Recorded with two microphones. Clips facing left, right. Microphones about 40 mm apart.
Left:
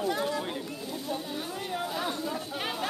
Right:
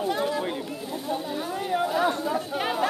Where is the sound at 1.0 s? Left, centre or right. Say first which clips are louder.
Right 6 dB; centre.